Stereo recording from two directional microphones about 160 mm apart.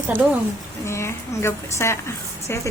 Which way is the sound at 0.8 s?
15° left (ahead or behind).